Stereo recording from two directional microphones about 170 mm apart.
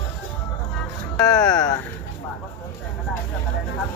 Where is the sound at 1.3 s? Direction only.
20° left (ahead or behind).